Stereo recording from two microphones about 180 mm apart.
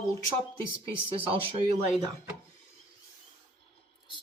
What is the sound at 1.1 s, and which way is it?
Speech, 30° right (ahead or behind).